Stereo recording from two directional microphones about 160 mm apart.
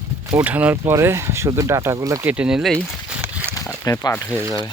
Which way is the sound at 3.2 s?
15° right (ahead or behind).